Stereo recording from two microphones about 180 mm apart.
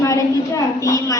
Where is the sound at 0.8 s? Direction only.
20° left (ahead or behind).